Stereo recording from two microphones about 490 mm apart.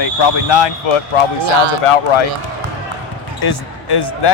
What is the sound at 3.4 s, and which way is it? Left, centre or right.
Speech, left.